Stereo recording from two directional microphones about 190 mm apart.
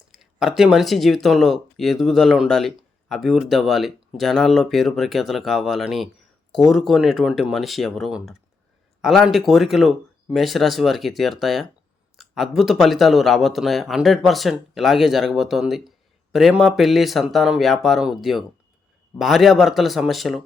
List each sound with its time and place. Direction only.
0.1 s speech: centre (ahead or behind)